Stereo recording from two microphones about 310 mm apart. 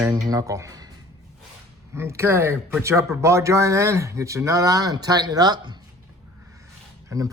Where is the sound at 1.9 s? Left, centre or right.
Centre.